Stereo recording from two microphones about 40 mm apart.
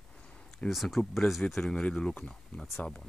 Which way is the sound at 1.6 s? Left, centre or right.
Left.